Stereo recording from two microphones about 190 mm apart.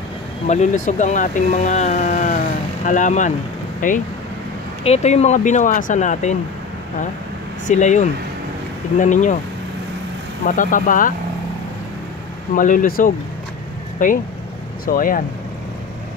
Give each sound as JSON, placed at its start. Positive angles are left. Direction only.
{"t": 0.5, "sound": "speech", "side_deg": 40}
{"t": 7.6, "sound": "speech", "side_deg": 40}
{"t": 10.4, "sound": "speech", "side_deg": 45}
{"t": 12.5, "sound": "speech", "side_deg": 45}